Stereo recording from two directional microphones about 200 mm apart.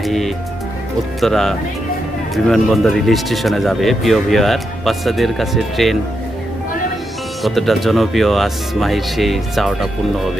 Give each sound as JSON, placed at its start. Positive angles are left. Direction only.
{"t": 0.0, "sound": "speech", "side_deg": 0}
{"t": 7.4, "sound": "speech", "side_deg": 0}